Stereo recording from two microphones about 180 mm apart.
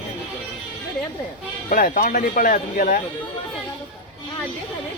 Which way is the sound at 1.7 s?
50° left (ahead or behind).